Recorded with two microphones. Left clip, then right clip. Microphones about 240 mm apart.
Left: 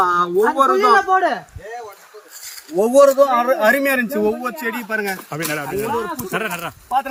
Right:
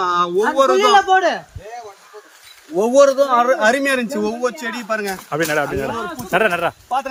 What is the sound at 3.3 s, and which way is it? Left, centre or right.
Speech, centre.